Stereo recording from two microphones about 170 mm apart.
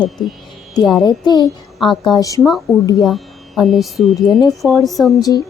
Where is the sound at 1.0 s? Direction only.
25° left (ahead or behind).